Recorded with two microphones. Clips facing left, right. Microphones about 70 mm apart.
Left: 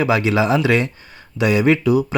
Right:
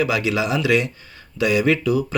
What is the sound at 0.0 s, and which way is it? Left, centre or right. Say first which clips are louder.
Speech: left 4 dB; left.